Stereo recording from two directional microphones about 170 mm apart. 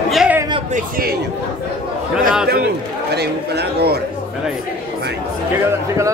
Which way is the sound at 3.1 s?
75° right (ahead or behind).